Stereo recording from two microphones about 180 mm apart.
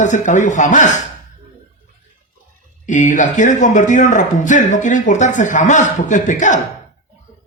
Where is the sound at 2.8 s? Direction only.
45° left (ahead or behind).